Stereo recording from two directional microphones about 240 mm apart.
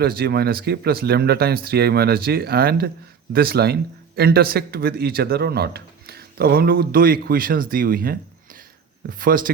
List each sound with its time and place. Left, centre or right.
0.0 s speech: right